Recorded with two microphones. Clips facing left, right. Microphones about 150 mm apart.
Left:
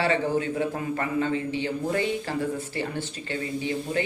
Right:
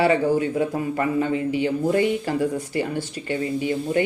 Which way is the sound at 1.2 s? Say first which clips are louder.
Right 4 dB; 15° right (ahead or behind).